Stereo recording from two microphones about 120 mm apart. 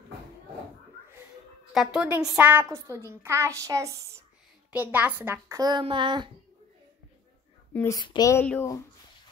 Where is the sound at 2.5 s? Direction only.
20° right (ahead or behind).